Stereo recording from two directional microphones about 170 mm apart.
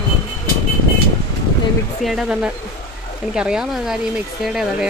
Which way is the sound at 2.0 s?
Centre (ahead or behind).